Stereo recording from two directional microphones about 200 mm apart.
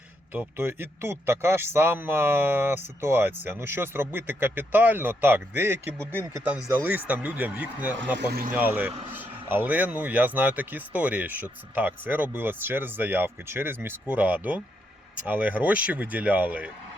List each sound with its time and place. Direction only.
0.3 s a man's voice: 10° right (ahead or behind)
8.2 s speech: 50° right (ahead or behind)
8.5 s a man's voice: 10° right (ahead or behind)